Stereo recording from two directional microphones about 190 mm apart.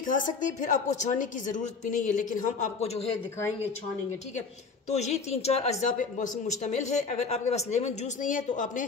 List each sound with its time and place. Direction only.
0.0 s a woman's voice: 45° left (ahead or behind)
4.8 s a woman's voice: 35° left (ahead or behind)